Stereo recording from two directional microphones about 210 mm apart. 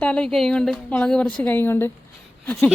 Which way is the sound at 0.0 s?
5° left (ahead or behind).